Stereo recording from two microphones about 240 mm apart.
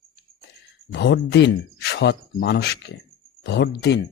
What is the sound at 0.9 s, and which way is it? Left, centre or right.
Speech, left.